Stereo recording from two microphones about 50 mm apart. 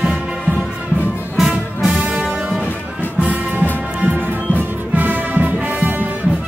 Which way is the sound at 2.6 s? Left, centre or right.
Left.